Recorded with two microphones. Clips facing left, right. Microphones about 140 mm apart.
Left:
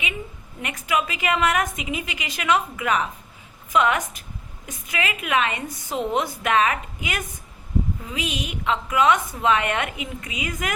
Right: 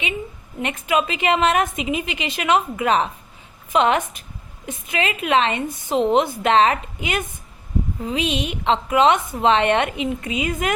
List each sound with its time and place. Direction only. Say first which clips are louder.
0.6 s a woman's voice: right 4 dB; 25° right (ahead or behind)